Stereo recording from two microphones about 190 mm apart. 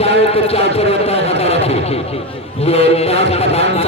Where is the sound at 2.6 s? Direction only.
35° left (ahead or behind).